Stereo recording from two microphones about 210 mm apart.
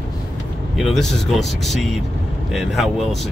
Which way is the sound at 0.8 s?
Centre (ahead or behind).